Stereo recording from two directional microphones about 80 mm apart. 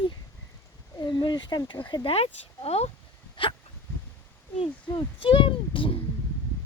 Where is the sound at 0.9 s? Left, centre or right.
Left.